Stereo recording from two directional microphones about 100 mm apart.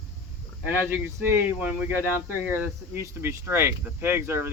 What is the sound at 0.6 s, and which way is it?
Speech, 20° right (ahead or behind).